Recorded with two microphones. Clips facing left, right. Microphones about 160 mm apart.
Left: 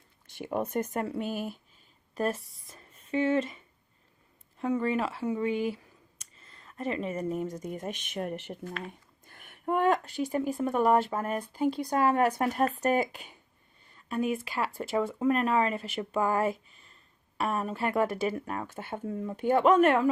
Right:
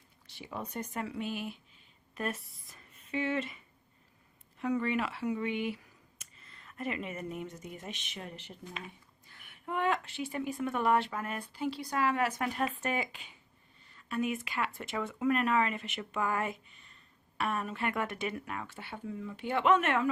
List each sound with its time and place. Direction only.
0.3 s a woman's voice: 50° left (ahead or behind)
2.1 s a woman's voice: 35° left (ahead or behind)
4.6 s a woman's voice: 30° left (ahead or behind)